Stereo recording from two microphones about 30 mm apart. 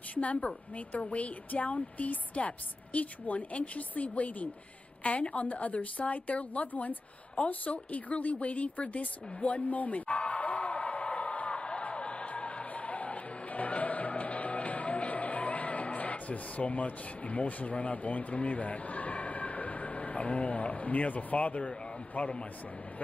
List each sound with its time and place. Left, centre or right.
0.1 s a woman's voice: left
1.5 s a woman's voice: left
6.7 s a woman's voice: left
7.4 s a woman's voice: left
9.7 s a sound: left
22.2 s a man's voice: left